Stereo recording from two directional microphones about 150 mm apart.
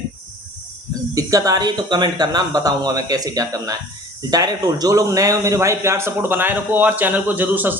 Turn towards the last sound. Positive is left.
turn(degrees=-10)  # may be behind; listen again after turning